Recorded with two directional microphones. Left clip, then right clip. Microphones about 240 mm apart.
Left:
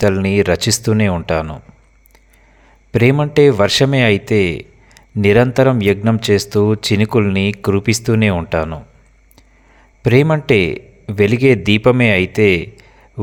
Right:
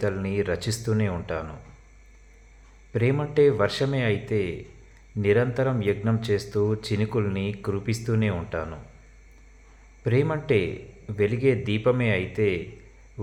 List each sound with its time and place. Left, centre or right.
0.0 s a man's voice: left
2.9 s a man's voice: left
10.0 s a man's voice: left